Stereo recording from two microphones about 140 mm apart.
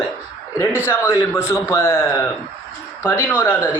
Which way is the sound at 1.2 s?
20° left (ahead or behind).